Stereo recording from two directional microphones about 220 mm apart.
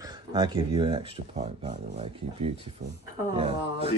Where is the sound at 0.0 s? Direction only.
20° right (ahead or behind).